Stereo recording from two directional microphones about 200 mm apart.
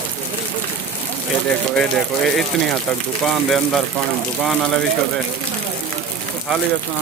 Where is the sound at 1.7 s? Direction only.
5° left (ahead or behind).